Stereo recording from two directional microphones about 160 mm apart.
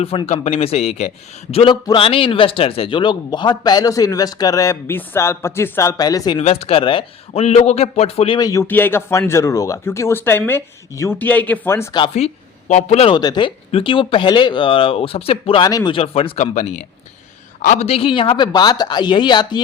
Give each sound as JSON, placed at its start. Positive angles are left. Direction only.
{"t": 0.0, "sound": "a man's voice", "side_deg": 35}
{"t": 6.4, "sound": "speech", "side_deg": 40}
{"t": 8.4, "sound": "a man's voice", "side_deg": 20}
{"t": 8.6, "sound": "speech", "side_deg": 10}
{"t": 11.9, "sound": "speech", "side_deg": 35}
{"t": 16.4, "sound": "a man's voice", "side_deg": 45}